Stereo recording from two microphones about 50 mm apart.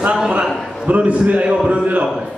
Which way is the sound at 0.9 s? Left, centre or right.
Right.